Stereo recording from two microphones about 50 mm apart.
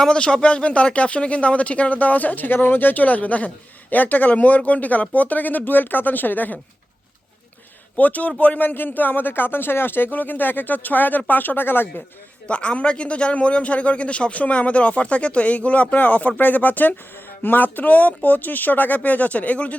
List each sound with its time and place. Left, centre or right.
0.0 s speech: centre; by 6.6 s left
7.9 s speech: left
12.5 s a man's voice: left